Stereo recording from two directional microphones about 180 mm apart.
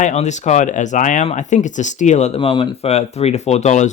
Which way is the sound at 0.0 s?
40° left (ahead or behind).